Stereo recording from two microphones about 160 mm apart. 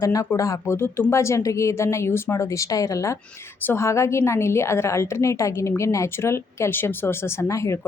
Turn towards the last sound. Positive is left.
turn(degrees=20)  # may be behind; listen again after turning